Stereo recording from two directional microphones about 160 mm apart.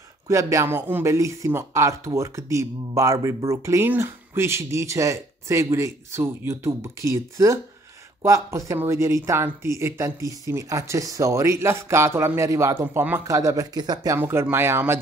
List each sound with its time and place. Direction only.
0.3 s speech: 20° right (ahead or behind)